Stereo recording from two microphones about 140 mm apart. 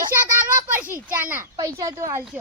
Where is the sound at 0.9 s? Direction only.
20° right (ahead or behind).